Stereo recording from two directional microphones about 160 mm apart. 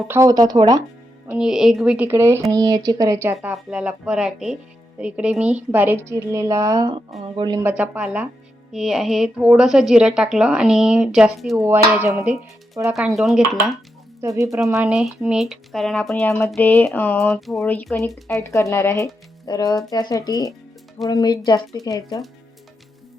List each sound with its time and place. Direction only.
0.1 s speech: 20° right (ahead or behind)
1.3 s a woman's voice: 5° right (ahead or behind); by 7.6 s 30° right (ahead or behind)
7.6 s a woman's voice: 10° right (ahead or behind)
11.5 s a woman's voice: 15° right (ahead or behind)
12.9 s a woman's voice: centre (ahead or behind)
14.2 s speech: 20° right (ahead or behind)
14.6 s a woman's voice: centre (ahead or behind)
16.6 s a sound: 10° left (ahead or behind)
18.3 s speech: 20° left (ahead or behind)